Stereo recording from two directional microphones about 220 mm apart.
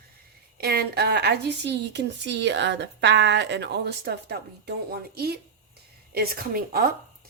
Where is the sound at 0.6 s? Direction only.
45° right (ahead or behind).